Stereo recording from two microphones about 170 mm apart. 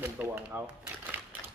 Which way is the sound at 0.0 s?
10° right (ahead or behind).